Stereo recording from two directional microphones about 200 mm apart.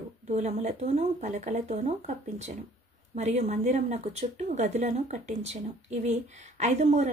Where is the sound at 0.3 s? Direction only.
35° right (ahead or behind).